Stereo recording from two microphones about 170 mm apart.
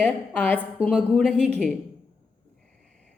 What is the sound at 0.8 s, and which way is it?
Speech, 35° right (ahead or behind).